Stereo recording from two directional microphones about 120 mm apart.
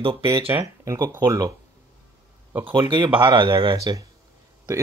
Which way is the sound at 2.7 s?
40° right (ahead or behind).